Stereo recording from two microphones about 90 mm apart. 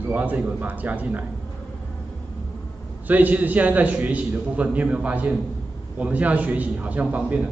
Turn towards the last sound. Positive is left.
turn(degrees=-15)  # may be behind; listen again after turning